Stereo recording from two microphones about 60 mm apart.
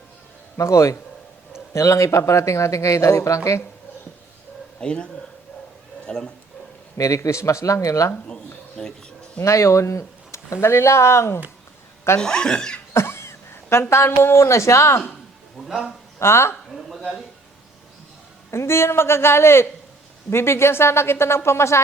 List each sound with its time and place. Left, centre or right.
0.5 s speech: left
4.8 s speech: centre
6.1 s speech: centre
6.9 s speech: left
8.1 s speech: centre
9.4 s speech: left
12.2 s speech: centre
12.9 s speech: left
15.6 s speech: centre
16.1 s speech: left
16.7 s speech: centre
18.5 s speech: left